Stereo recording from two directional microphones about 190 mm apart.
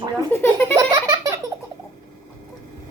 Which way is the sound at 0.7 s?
15° right (ahead or behind).